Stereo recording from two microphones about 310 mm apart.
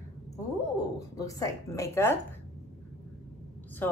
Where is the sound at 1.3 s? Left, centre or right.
Centre.